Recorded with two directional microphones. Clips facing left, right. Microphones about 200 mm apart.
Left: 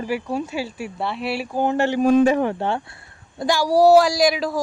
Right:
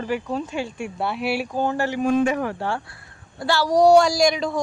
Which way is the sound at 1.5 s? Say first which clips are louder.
Left 8 dB; 20° left (ahead or behind).